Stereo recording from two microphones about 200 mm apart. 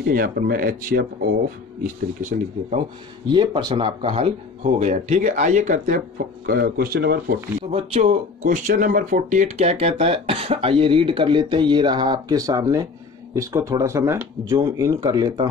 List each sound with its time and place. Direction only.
0.1 s speech: 45° right (ahead or behind)
3.3 s speech: 25° right (ahead or behind); by 7.3 s 50° right (ahead or behind)
7.7 s speech: 30° right (ahead or behind); by 15.4 s 15° right (ahead or behind)